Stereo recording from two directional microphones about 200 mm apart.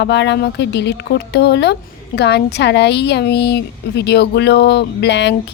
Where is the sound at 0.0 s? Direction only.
60° left (ahead or behind).